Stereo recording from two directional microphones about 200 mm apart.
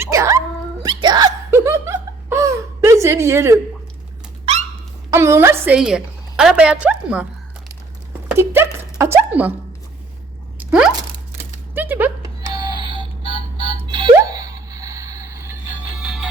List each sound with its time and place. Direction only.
0.0 s cat: 15° right (ahead or behind)
0.8 s hiccup: 20° right (ahead or behind)
5.1 s a woman's voice: 15° right (ahead or behind)
8.3 s a sound: 10° right (ahead or behind)
10.6 s a sound: 5° right (ahead or behind)
12.5 s music: 20° right (ahead or behind)
16.0 s music: 5° right (ahead or behind)